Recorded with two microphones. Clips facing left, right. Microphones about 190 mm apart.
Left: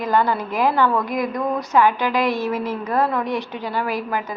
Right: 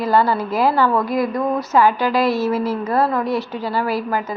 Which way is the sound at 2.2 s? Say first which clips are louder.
Right 3 dB; 15° left (ahead or behind).